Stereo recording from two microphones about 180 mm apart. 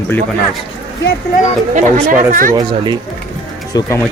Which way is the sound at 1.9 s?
50° right (ahead or behind).